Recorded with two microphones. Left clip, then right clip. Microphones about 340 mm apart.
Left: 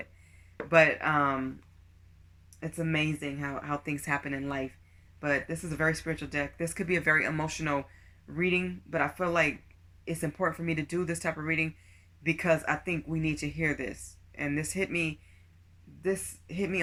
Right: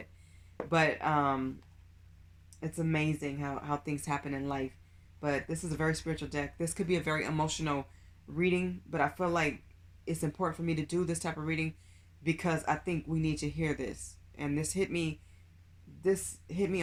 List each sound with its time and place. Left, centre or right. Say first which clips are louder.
0.5 s speech: left 6 dB; centre
2.6 s speech: left 3 dB; centre